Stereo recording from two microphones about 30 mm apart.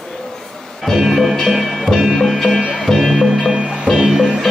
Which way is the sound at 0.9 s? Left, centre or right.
Centre.